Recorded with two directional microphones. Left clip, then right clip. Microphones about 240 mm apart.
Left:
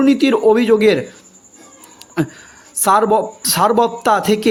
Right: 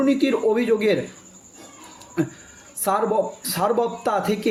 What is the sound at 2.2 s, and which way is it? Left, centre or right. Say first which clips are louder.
Speech: left 5 dB; left.